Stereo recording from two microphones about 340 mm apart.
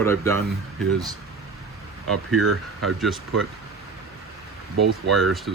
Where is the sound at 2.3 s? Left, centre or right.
Right.